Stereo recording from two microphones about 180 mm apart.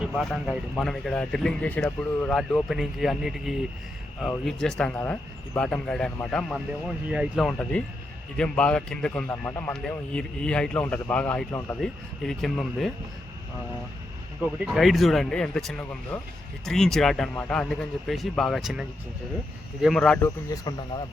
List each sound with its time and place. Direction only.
0.0 s speech: centre (ahead or behind)
7.1 s a man's voice: centre (ahead or behind)
14.4 s speech: centre (ahead or behind)
20.2 s speech: 20° left (ahead or behind)